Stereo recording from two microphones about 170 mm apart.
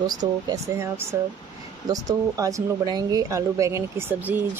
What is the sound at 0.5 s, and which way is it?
Speech, 15° right (ahead or behind).